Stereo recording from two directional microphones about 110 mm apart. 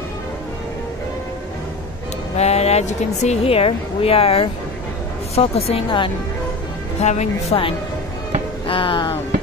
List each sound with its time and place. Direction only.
2.3 s speech: 75° left (ahead or behind); by 6.1 s 50° left (ahead or behind)
7.0 s speech: 90° left
7.5 s speech: 60° left (ahead or behind)
8.6 s a sound: 55° left (ahead or behind)